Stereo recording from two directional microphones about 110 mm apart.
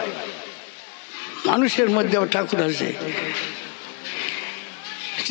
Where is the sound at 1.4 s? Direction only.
25° left (ahead or behind).